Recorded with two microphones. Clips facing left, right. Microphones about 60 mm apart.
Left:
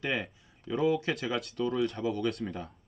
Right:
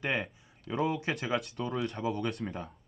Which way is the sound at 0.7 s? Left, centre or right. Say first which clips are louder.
Left 3 dB; right.